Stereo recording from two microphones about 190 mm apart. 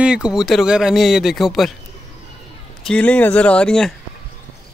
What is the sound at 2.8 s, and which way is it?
Speech, 5° left (ahead or behind).